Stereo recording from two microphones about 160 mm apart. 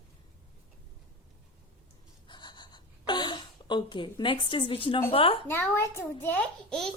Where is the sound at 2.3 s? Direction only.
30° left (ahead or behind).